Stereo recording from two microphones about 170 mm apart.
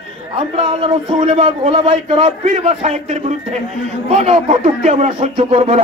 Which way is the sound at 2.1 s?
45° right (ahead or behind).